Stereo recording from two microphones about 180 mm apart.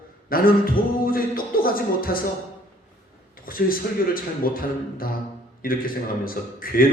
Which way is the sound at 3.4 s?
50° left (ahead or behind).